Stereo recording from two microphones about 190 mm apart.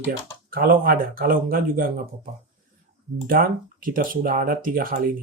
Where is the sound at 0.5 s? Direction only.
50° right (ahead or behind).